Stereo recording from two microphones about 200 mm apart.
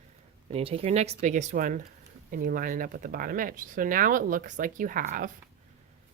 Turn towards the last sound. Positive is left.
turn(degrees=-45)  # may be behind; listen again after turning